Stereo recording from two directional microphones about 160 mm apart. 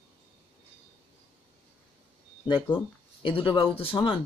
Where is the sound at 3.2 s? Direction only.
30° left (ahead or behind).